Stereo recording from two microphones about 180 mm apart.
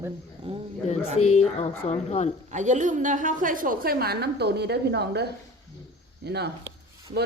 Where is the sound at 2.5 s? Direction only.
40° right (ahead or behind).